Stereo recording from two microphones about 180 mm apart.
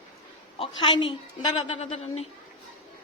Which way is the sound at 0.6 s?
25° left (ahead or behind).